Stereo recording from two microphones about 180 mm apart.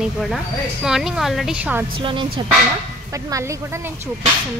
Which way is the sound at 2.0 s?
30° right (ahead or behind).